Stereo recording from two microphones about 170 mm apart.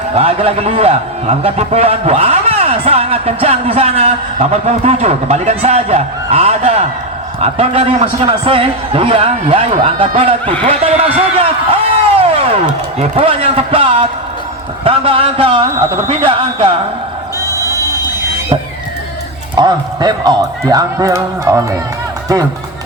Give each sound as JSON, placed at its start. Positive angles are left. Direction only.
{"t": 0.2, "sound": "a man's voice", "side_deg": -35}
{"t": 10.6, "sound": "a sound", "side_deg": -35}
{"t": 13.0, "sound": "a man's voice", "side_deg": -35}
{"t": 19.5, "sound": "a man's voice", "side_deg": -25}